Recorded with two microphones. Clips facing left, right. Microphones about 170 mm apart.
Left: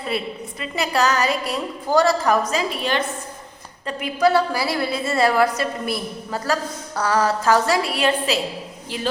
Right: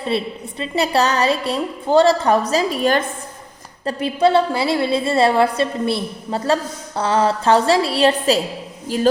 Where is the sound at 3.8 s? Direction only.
30° right (ahead or behind).